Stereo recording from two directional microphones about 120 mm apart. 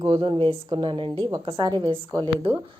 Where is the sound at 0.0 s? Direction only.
40° right (ahead or behind).